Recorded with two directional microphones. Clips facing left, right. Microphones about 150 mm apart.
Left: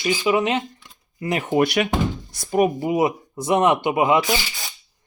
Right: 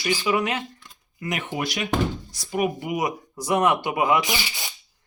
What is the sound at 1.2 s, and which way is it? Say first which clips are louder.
Speech: left 8 dB; 35° left (ahead or behind).